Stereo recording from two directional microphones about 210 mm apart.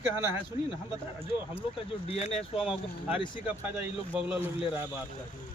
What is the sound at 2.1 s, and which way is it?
Speech, 30° left (ahead or behind).